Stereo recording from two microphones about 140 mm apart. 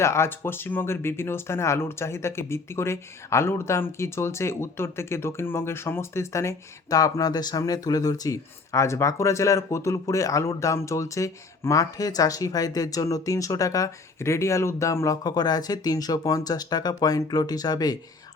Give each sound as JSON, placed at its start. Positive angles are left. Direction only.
{"t": 0.0, "sound": "speech", "side_deg": 20}